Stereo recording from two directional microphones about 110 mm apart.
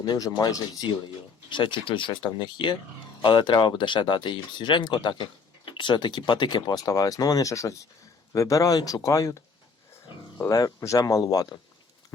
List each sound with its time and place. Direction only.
0.0 s speech: 35° left (ahead or behind)